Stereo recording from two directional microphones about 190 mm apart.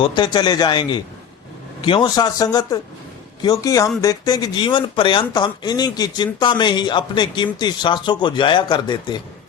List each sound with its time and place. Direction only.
0.0 s speech: 25° left (ahead or behind)